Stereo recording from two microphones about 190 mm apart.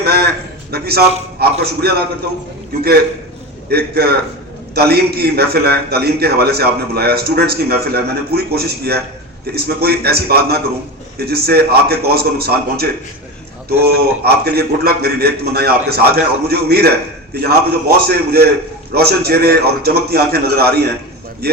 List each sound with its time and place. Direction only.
0.0 s a sound: 55° right (ahead or behind)
0.7 s a man's voice: 55° right (ahead or behind)
3.7 s a man's voice: 55° right (ahead or behind)